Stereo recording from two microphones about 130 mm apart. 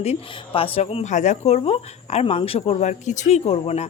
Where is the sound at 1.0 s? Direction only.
70° left (ahead or behind).